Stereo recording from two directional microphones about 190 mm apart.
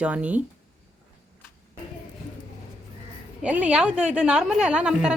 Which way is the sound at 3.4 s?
5° right (ahead or behind).